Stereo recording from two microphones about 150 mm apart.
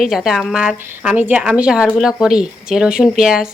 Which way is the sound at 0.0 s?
Centre (ahead or behind).